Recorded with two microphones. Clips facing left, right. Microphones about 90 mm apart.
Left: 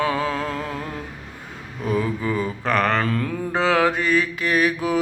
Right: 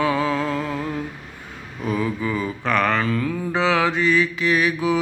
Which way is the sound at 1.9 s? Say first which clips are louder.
Left 1 dB; 35° left (ahead or behind).